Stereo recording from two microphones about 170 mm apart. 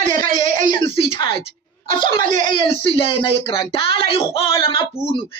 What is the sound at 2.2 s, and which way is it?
Speech, 50° right (ahead or behind).